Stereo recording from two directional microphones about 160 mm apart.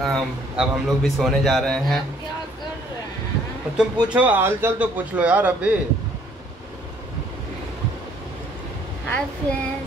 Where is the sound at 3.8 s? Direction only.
10° right (ahead or behind).